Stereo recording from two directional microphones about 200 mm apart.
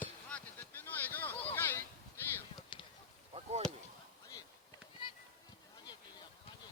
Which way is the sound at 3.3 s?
30° right (ahead or behind).